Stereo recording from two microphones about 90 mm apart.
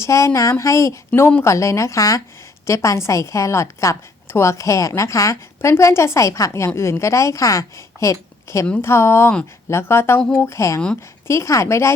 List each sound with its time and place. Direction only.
0.0 s a woman's voice: 35° left (ahead or behind)